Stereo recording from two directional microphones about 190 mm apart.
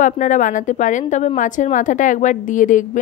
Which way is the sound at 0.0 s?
40° left (ahead or behind).